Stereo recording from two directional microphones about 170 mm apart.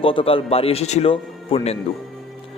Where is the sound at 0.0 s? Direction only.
30° left (ahead or behind).